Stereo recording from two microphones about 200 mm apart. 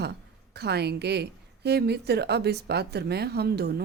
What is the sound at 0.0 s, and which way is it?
A woman's voice, 55° right (ahead or behind).